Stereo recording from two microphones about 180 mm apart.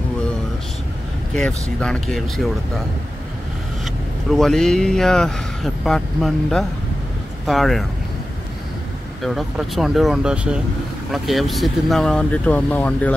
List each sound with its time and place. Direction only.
1.3 s speech: 5° left (ahead or behind)
3.8 s speech: centre (ahead or behind)
9.2 s speech: centre (ahead or behind)